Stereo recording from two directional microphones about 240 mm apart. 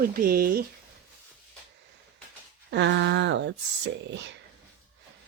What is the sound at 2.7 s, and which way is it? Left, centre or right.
Speech, right.